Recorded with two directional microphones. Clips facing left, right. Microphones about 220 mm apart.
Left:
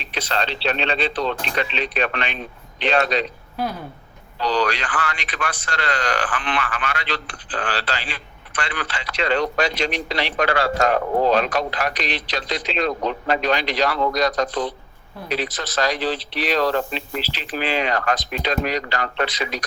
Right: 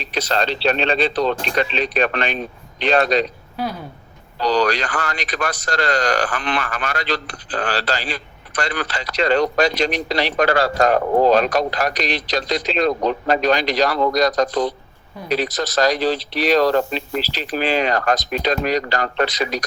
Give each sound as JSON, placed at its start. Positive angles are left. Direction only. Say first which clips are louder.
{"t": 0.0, "sound": "a man's voice", "louder": "right 4 dB", "side_deg": -40}
{"t": 4.4, "sound": "a man's voice", "louder": "right 4 dB", "side_deg": -40}